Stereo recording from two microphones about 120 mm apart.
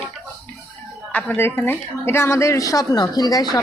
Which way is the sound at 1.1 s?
15° left (ahead or behind).